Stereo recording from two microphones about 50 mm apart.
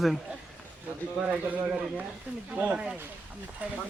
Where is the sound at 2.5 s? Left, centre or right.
Right.